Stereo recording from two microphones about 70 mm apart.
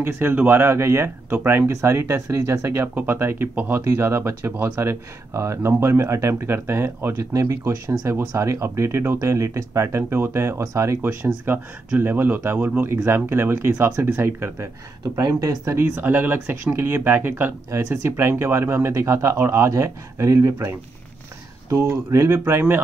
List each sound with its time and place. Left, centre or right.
0.0 s speech: right
1.3 s speech: right
1.7 s speech: right
2.9 s speech: right
7.3 s speech: right
11.5 s speech: right
12.8 s speech: right
15.1 s speech: right
15.7 s speech: right
17.6 s speech: right
21.7 s speech: right